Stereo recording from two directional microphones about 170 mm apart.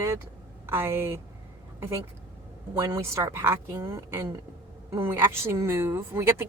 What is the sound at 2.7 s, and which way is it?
Speech, 20° right (ahead or behind).